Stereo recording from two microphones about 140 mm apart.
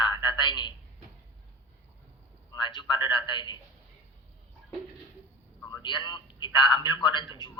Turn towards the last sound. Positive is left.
turn(degrees=35)  # may be behind; listen again after turning